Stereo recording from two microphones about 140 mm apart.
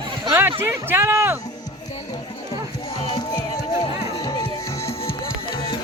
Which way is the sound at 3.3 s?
30° left (ahead or behind).